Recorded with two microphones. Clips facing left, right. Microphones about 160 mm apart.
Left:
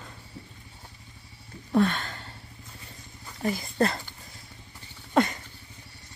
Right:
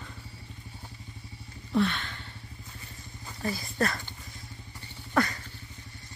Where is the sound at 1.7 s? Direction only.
45° left (ahead or behind).